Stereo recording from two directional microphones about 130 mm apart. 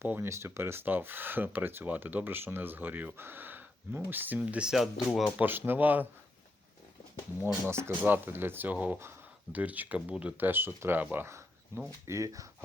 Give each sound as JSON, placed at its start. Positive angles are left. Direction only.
{"t": 0.0, "sound": "speech", "side_deg": -15}
{"t": 5.4, "sound": "speech", "side_deg": -15}
{"t": 7.4, "sound": "speech", "side_deg": -20}